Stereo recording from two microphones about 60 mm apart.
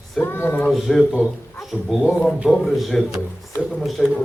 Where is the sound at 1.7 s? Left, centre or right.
Centre.